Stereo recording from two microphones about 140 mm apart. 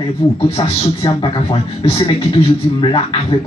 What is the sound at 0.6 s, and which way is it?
A man's voice, 45° left (ahead or behind).